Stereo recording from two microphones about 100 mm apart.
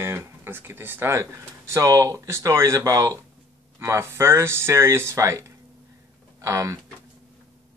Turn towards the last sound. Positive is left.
turn(degrees=-30)  # may be behind; listen again after turning